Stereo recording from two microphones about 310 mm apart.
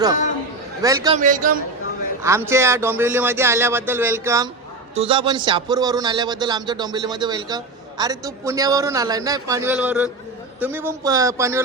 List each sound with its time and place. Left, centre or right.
0.8 s a man's voice: centre
1.2 s a man's voice: right
2.2 s a man's voice: centre